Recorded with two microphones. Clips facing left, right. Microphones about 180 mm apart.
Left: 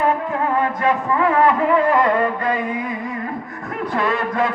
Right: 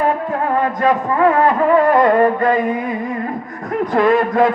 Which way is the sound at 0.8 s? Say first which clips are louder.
Right 4 dB; 40° right (ahead or behind).